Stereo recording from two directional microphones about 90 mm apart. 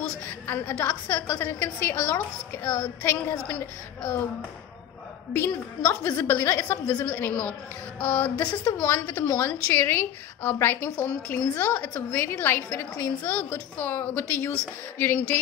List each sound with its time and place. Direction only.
0.5 s a woman's voice: 20° left (ahead or behind)
5.3 s a woman's voice: 20° left (ahead or behind)